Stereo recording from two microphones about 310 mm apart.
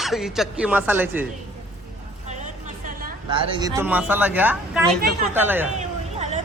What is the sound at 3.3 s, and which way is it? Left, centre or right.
Speech, centre.